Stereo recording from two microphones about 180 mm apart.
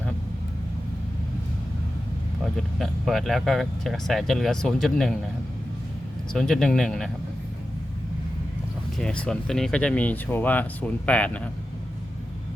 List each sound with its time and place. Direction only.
2.4 s speech: centre (ahead or behind)
6.3 s speech: 5° left (ahead or behind)
9.0 s speech: 5° left (ahead or behind)